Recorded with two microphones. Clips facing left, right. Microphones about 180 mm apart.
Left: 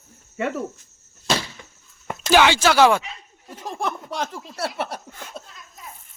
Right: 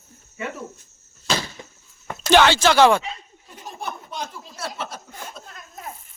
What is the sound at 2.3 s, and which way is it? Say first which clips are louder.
Speech: right 1 dB; 10° left (ahead or behind).